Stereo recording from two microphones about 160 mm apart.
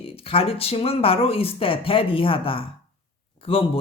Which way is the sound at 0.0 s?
35° left (ahead or behind).